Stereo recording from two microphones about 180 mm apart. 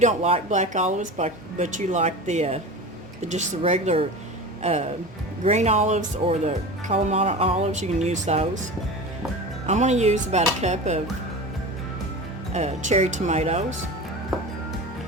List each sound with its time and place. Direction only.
0.0 s speech: 35° right (ahead or behind)
9.6 s speech: 40° right (ahead or behind)
12.5 s speech: 40° right (ahead or behind)